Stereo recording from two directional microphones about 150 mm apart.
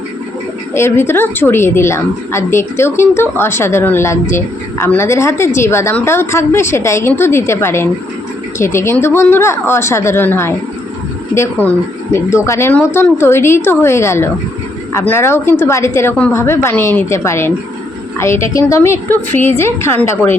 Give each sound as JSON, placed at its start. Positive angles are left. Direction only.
{"t": 0.7, "sound": "a woman's voice", "side_deg": 15}